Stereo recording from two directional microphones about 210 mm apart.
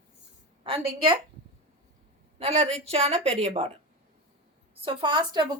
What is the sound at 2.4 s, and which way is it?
Speech, 30° right (ahead or behind).